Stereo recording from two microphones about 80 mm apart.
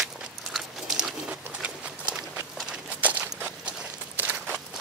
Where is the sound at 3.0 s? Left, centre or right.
Centre.